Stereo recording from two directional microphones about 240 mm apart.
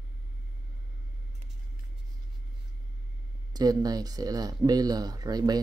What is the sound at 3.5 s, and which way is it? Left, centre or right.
Speech, centre.